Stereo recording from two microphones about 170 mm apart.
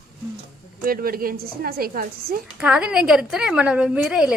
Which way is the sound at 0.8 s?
60° right (ahead or behind).